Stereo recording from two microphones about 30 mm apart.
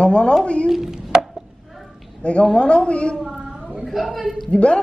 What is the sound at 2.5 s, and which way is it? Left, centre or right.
Speech, left.